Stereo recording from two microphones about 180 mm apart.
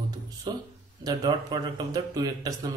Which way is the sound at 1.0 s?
25° right (ahead or behind).